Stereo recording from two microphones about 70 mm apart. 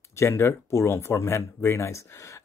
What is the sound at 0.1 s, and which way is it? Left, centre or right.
Speech, left.